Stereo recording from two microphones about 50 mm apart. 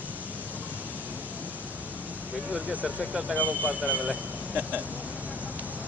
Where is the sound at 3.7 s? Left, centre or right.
Right.